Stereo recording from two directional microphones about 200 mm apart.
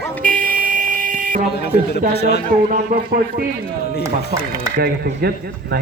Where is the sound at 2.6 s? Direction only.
50° right (ahead or behind).